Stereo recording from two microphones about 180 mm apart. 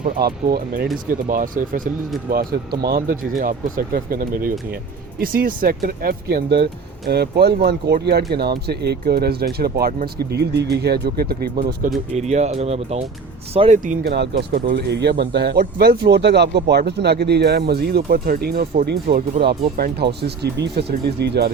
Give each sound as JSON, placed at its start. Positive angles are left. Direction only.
{"t": 0.2, "sound": "speech", "side_deg": -60}
{"t": 2.3, "sound": "speech", "side_deg": -60}
{"t": 12.1, "sound": "speech", "side_deg": -40}
{"t": 13.8, "sound": "speech", "side_deg": -55}